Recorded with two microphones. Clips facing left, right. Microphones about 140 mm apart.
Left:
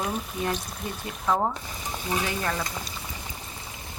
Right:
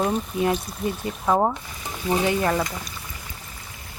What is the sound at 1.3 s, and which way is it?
Speech, 40° right (ahead or behind).